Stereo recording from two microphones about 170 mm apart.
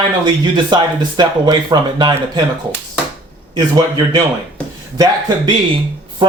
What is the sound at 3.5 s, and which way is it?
Speech, 25° right (ahead or behind).